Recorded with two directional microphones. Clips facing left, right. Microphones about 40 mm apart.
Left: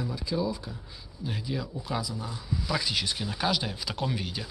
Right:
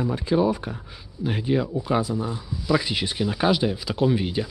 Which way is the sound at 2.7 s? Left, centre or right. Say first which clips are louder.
Right 7 dB; right.